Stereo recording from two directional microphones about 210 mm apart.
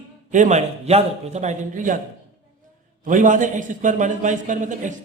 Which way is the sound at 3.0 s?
40° right (ahead or behind).